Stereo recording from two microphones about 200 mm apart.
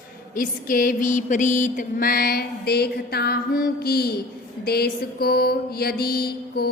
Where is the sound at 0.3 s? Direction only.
45° left (ahead or behind).